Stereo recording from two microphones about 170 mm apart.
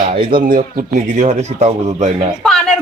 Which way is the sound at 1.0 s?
45° right (ahead or behind).